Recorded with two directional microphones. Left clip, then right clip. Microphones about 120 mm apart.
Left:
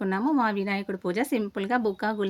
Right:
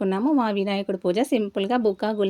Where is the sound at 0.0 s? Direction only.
15° right (ahead or behind).